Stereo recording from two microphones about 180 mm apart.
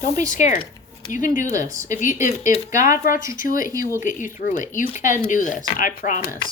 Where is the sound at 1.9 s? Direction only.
45° left (ahead or behind).